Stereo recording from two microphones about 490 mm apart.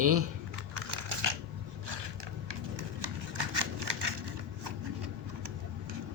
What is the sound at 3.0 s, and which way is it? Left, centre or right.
Scissors, right.